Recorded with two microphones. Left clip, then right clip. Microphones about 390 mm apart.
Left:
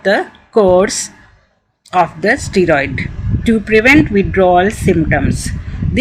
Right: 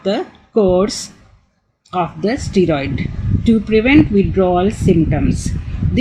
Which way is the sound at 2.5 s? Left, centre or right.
Centre.